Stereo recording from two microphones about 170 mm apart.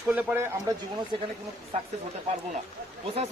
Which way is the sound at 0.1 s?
10° right (ahead or behind).